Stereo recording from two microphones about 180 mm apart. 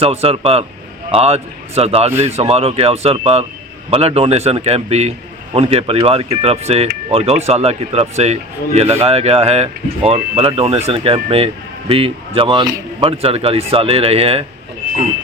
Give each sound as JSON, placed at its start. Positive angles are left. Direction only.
{"t": 0.0, "sound": "speech", "side_deg": -35}